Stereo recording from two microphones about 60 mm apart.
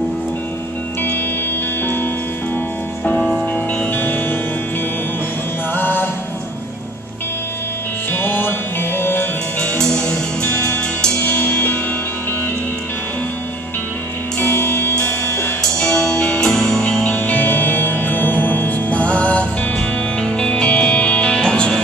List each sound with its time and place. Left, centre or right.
3.9 s music: left
5.8 s music: left
8.1 s music: left
9.8 s music: centre
10.5 s music: left
14.4 s music: left
15.8 s music: centre
17.1 s music: left; by 21.7 s centre